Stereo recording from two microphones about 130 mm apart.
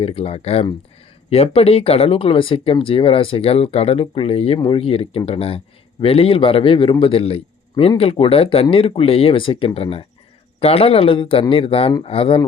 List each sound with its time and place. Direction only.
0.0 s speech: 50° left (ahead or behind)